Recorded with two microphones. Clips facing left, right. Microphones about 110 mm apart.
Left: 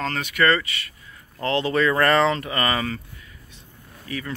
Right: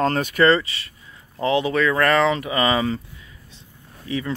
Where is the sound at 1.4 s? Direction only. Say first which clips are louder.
Right 3 dB; 10° right (ahead or behind).